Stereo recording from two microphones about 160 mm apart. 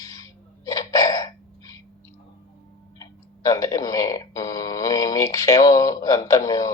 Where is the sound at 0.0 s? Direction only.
20° left (ahead or behind).